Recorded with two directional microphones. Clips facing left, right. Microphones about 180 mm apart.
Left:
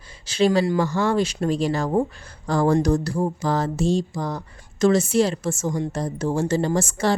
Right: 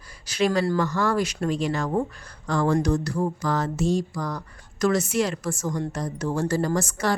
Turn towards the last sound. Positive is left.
turn(degrees=25)  # may be behind; listen again after turning